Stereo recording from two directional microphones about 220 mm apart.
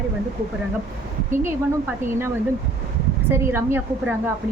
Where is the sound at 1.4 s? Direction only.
10° right (ahead or behind).